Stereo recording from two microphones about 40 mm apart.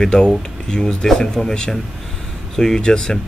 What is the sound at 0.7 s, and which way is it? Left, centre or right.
Speech, centre.